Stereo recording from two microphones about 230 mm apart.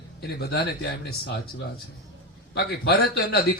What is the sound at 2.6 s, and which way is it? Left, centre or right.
Speech, left.